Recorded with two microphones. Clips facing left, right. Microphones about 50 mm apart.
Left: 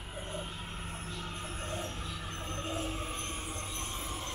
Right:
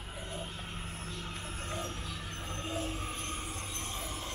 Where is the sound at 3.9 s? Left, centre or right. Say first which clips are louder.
Even; centre.